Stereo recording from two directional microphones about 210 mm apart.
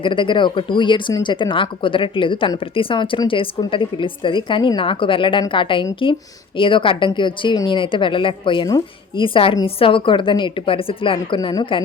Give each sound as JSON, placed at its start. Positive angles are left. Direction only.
{"t": 0.0, "sound": "speech", "side_deg": 25}